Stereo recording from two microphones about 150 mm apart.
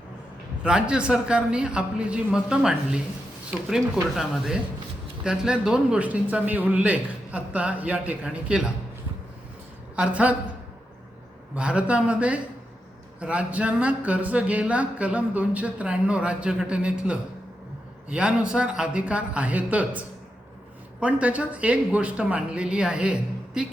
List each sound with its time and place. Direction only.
0.6 s speech: 5° right (ahead or behind)
9.9 s a woman's voice: 10° right (ahead or behind)
11.5 s speech: 5° right (ahead or behind)